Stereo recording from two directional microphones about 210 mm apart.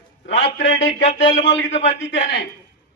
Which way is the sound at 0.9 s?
30° left (ahead or behind).